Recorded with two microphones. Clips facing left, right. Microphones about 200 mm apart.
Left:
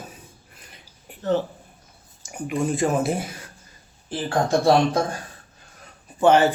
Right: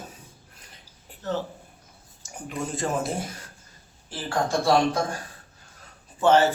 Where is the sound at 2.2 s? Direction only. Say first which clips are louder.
Left 7 dB; 15° left (ahead or behind).